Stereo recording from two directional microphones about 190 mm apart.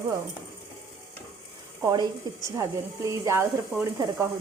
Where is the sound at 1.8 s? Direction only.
20° right (ahead or behind).